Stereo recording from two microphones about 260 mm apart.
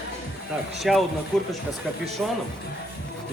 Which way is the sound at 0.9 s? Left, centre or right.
Centre.